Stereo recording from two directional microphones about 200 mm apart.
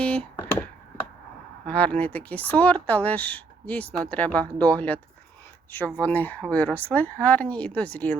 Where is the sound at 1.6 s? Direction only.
5° left (ahead or behind).